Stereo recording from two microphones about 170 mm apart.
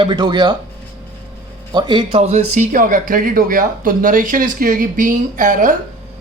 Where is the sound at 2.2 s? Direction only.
45° right (ahead or behind).